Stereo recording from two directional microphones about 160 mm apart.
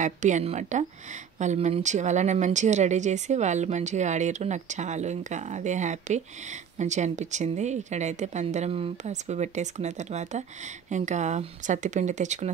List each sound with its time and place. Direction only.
0.0 s speech: 50° right (ahead or behind)